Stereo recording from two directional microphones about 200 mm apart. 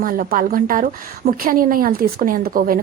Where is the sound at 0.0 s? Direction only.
45° right (ahead or behind).